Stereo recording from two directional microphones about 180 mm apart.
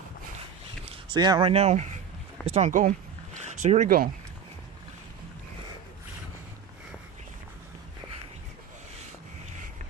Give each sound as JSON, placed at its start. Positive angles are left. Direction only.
{"t": 1.1, "sound": "speech", "side_deg": -25}
{"t": 1.5, "sound": "speech", "side_deg": -35}